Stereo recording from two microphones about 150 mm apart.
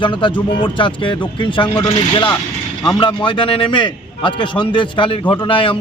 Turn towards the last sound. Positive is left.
turn(degrees=35)  # may be behind; listen again after turning